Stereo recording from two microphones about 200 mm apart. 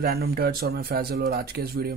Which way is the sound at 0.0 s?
50° right (ahead or behind).